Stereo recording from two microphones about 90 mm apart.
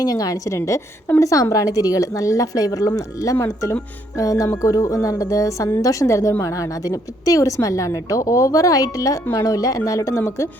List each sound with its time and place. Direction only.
0.1 s a woman's voice: 40° left (ahead or behind)
3.3 s a woman's voice: 30° left (ahead or behind)